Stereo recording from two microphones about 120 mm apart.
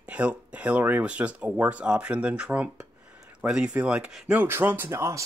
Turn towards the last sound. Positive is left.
turn(degrees=-25)  # may be behind; listen again after turning